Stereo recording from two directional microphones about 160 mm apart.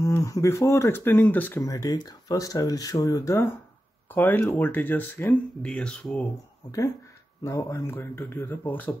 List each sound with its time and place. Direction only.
0.0 s speech: 20° left (ahead or behind)
7.4 s speech: 15° left (ahead or behind)